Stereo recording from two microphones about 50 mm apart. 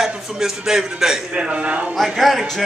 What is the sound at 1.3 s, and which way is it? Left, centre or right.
Speech, right.